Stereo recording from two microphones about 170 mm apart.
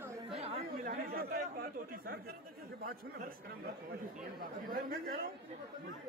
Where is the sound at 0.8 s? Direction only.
65° right (ahead or behind).